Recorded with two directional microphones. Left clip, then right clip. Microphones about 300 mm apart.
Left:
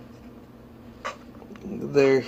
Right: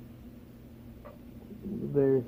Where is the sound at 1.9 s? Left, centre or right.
Centre.